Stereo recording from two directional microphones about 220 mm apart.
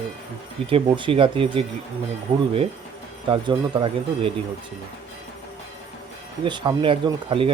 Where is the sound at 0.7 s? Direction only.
25° right (ahead or behind).